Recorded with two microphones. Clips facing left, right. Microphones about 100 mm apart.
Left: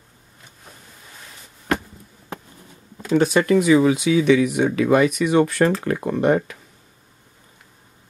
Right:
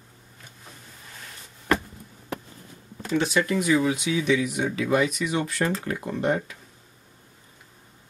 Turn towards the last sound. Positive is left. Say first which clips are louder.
# left 7 dB
turn(degrees=65)  # may be behind; listen again after turning